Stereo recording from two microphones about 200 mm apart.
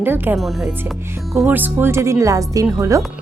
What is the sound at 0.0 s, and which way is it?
Speech, 10° right (ahead or behind).